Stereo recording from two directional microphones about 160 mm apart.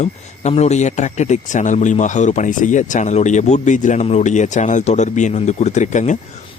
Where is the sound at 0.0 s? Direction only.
45° left (ahead or behind).